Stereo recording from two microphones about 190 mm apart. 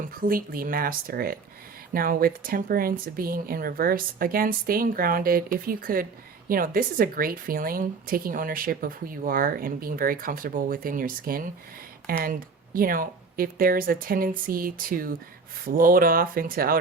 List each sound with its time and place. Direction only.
0.1 s a woman's voice: 50° right (ahead or behind)